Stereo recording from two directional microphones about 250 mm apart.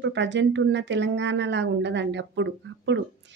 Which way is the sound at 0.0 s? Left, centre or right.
Right.